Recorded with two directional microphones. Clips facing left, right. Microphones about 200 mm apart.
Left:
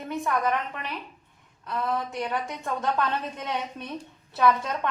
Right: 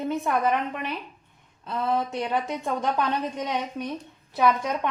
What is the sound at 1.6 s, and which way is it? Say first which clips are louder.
Speech: right 3 dB; 25° right (ahead or behind).